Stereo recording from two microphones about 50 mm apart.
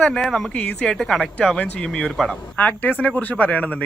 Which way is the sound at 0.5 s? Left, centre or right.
Centre.